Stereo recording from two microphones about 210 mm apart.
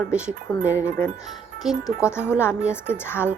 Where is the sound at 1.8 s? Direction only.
10° left (ahead or behind).